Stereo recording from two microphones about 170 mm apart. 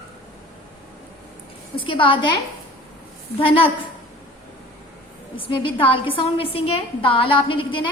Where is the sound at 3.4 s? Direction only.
30° left (ahead or behind).